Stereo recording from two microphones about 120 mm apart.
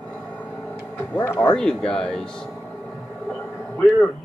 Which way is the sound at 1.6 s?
5° left (ahead or behind).